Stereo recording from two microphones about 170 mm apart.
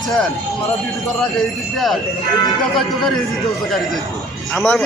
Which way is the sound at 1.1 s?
Centre (ahead or behind).